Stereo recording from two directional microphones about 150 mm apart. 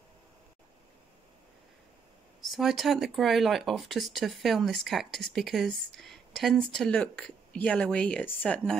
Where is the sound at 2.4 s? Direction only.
Centre (ahead or behind).